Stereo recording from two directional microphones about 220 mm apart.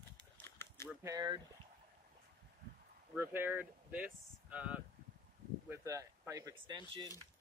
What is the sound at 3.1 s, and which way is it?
Speech, 10° right (ahead or behind).